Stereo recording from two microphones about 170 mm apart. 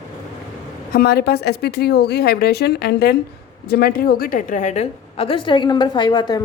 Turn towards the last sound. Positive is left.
turn(degrees=25)  # may be behind; listen again after turning